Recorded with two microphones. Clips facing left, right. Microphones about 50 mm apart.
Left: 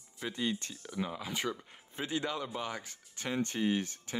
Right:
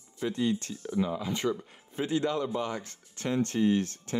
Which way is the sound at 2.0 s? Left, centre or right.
Left.